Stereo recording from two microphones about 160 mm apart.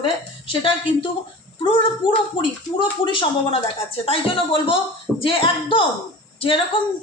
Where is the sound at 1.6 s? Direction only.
30° left (ahead or behind).